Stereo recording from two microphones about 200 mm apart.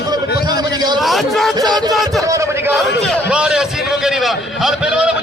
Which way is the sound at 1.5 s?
20° right (ahead or behind).